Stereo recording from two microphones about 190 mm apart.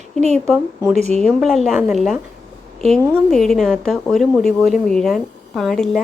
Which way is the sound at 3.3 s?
Centre (ahead or behind).